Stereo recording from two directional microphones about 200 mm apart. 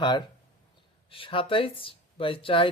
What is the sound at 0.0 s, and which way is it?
Speech, 20° left (ahead or behind).